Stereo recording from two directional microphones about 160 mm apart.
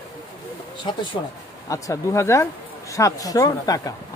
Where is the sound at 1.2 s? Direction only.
25° left (ahead or behind).